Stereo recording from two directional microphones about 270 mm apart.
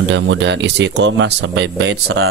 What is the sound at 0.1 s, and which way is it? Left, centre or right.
A man's voice, right.